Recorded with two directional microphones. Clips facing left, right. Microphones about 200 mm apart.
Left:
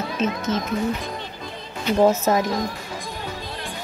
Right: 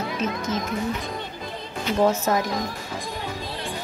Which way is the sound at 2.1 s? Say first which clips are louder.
Left 3 dB; 20° left (ahead or behind).